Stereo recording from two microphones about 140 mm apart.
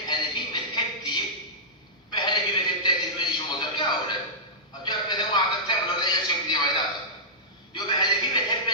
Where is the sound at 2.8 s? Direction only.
30° left (ahead or behind).